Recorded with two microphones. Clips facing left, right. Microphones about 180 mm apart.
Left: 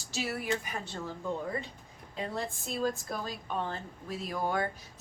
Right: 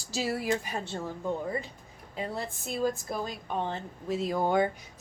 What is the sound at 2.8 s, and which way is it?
Speech, 20° right (ahead or behind).